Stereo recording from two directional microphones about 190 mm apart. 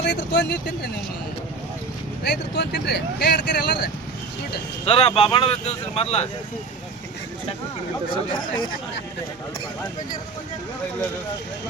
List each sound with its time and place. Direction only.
0.0 s speech: 60° left (ahead or behind)
2.2 s speech: 65° left (ahead or behind)
4.9 s speech: 30° left (ahead or behind)
8.1 s speech: 20° left (ahead or behind)